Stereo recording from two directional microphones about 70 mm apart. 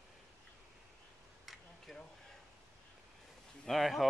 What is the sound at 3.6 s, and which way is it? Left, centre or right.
Speech, centre.